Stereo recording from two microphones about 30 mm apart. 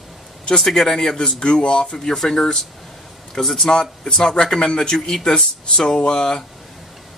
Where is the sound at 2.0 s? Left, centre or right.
Centre.